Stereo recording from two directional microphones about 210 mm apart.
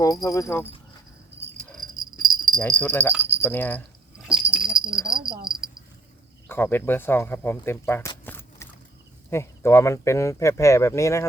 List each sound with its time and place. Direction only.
0.0 s speech: 15° left (ahead or behind)
1.9 s dog: 40° right (ahead or behind)
2.6 s speech: 5° left (ahead or behind)
4.4 s jingle bell: 5° right (ahead or behind)
5.1 s cricket: 25° right (ahead or behind)
6.5 s speech: 10° left (ahead or behind)